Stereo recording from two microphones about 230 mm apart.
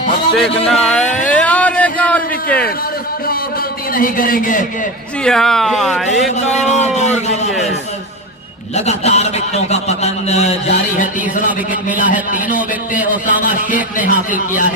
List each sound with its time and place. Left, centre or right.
0.3 s a sound: centre
3.9 s a man's voice: left
5.2 s speech: centre
6.1 s a man's voice: left
8.7 s a man's voice: left